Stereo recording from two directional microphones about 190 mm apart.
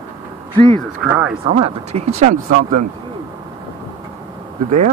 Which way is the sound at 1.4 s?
30° right (ahead or behind).